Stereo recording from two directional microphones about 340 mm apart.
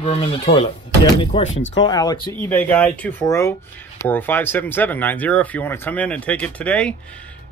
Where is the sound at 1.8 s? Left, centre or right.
Centre.